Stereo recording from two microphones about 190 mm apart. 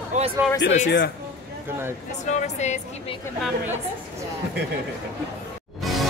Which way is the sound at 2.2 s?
35° left (ahead or behind).